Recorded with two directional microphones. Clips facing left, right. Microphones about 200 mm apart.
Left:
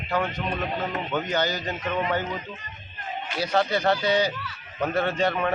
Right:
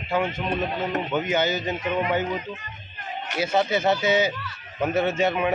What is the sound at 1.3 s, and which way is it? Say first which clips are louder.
Speech: right 3 dB; 25° right (ahead or behind).